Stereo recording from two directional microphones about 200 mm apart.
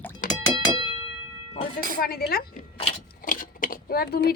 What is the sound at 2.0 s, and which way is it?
Speech, 50° left (ahead or behind).